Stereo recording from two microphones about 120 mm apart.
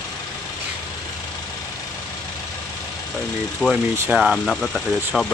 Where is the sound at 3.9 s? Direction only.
15° right (ahead or behind).